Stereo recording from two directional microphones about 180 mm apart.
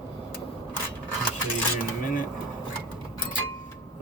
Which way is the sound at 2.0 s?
50° left (ahead or behind).